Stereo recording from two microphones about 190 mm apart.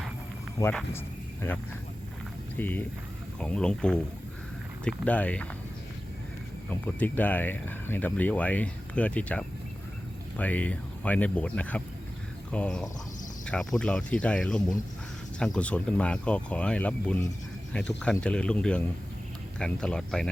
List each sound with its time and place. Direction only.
0.6 s speech: 10° left (ahead or behind)
2.6 s speech: 10° left (ahead or behind)
6.7 s speech: 10° left (ahead or behind)